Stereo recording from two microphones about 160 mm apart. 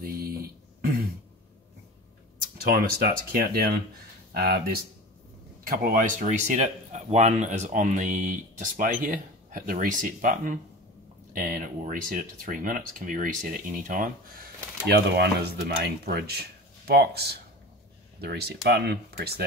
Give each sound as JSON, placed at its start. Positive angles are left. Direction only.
{"t": 2.5, "sound": "speech", "side_deg": -70}
{"t": 4.3, "sound": "speech", "side_deg": -90}
{"t": 5.6, "sound": "speech", "side_deg": -60}